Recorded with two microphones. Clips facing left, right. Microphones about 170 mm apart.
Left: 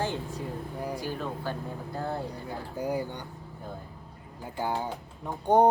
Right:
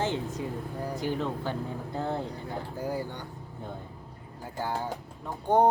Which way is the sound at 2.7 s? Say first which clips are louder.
Left 4 dB; 15° left (ahead or behind).